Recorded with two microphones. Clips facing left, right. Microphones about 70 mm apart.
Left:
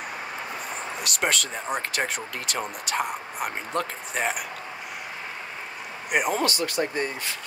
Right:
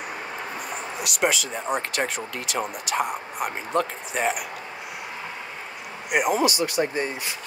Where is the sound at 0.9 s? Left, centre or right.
Centre.